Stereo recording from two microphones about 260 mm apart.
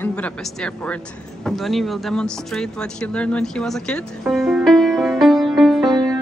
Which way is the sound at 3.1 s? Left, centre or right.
Centre.